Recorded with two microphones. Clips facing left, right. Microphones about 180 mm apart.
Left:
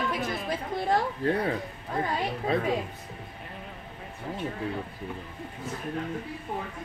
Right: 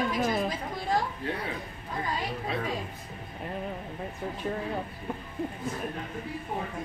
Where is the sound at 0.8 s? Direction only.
55° left (ahead or behind).